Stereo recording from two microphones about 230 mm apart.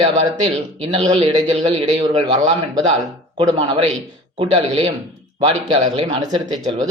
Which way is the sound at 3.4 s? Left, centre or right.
Right.